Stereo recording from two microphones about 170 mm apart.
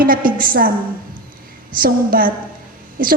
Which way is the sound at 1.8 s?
55° right (ahead or behind).